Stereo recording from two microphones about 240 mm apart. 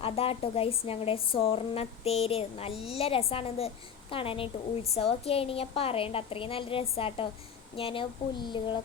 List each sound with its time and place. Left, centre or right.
0.0 s speech: left